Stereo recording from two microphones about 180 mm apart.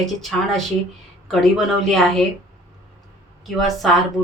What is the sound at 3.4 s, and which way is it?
Speech, centre (ahead or behind).